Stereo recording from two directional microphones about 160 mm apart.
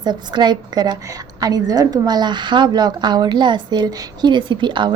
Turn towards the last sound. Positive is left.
turn(degrees=-30)  # may be behind; listen again after turning